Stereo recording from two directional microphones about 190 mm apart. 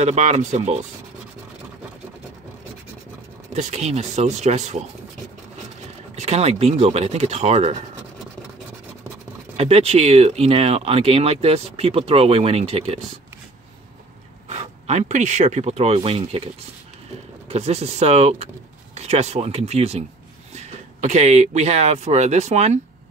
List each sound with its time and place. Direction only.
0.0 s speech: 35° right (ahead or behind)
3.5 s speech: 35° right (ahead or behind)
6.1 s speech: 35° right (ahead or behind)
9.6 s speech: 30° right (ahead or behind)
14.5 s speech: 35° right (ahead or behind)
17.5 s speech: 35° right (ahead or behind)